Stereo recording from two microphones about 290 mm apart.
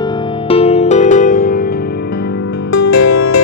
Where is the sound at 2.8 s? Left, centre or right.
Left.